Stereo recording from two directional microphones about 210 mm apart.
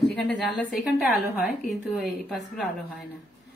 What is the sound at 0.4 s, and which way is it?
A woman's voice, centre (ahead or behind).